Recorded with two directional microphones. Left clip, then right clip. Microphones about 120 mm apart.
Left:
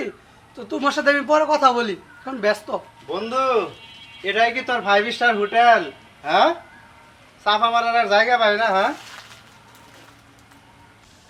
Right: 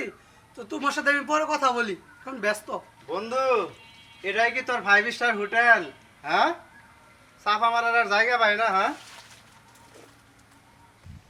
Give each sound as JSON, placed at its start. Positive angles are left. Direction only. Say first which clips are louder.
{"t": 0.5, "sound": "speech", "louder": "left 6 dB", "side_deg": -20}